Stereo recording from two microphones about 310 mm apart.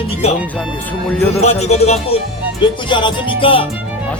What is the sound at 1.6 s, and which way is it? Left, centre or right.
Music, left.